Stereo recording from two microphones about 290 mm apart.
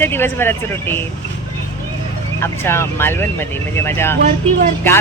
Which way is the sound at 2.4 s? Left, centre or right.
Centre.